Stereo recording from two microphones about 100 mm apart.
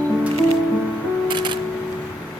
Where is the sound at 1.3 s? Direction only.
50° right (ahead or behind).